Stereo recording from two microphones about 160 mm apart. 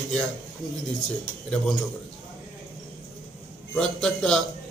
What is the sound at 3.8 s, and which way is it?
Speech, 5° left (ahead or behind).